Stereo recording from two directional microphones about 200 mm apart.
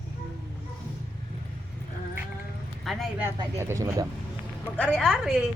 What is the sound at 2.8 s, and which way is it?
Speech, centre (ahead or behind).